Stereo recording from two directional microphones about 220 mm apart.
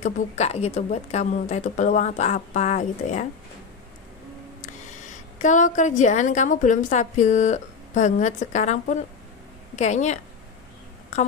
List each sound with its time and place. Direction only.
0.0 s a woman's voice: 30° left (ahead or behind)
5.4 s a woman's voice: 35° left (ahead or behind)